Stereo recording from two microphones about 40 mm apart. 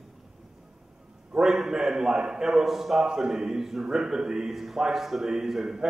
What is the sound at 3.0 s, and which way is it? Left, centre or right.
A man's voice, centre.